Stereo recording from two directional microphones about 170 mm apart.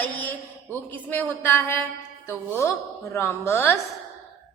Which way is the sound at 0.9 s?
10° left (ahead or behind).